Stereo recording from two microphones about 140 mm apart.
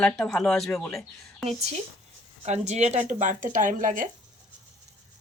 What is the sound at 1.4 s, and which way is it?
Speech, 50° right (ahead or behind).